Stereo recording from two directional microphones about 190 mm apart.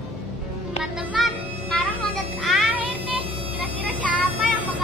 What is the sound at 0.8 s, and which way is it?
Music, centre (ahead or behind).